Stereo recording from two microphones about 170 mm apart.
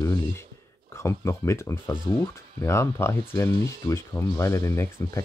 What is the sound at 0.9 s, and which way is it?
Speech, 15° left (ahead or behind).